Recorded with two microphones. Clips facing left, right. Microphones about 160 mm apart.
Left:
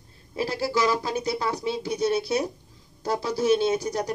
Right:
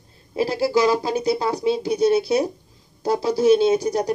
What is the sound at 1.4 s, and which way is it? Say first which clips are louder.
Speech: right 6 dB; 35° right (ahead or behind).